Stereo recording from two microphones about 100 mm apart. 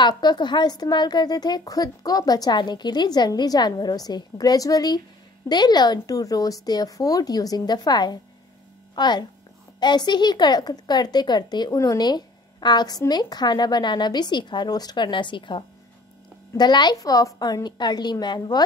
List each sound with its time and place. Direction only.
0.0 s a woman's voice: 45° left (ahead or behind)